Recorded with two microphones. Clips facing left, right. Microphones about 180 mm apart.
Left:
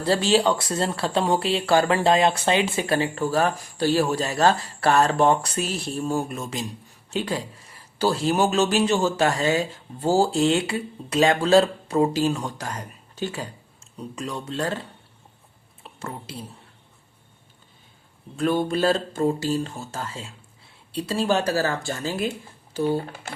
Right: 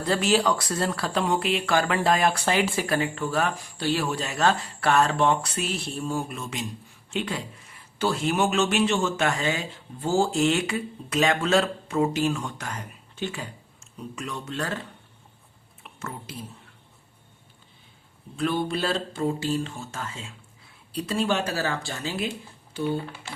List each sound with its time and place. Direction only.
0.0 s speech: 30° left (ahead or behind)
3.2 s speech: 40° left (ahead or behind)
15.8 s a sound: 30° left (ahead or behind)
18.3 s speech: 45° left (ahead or behind)